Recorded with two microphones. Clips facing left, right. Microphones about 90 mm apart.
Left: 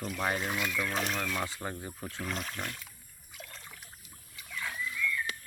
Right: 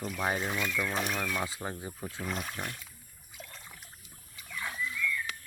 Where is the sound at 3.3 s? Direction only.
5° right (ahead or behind).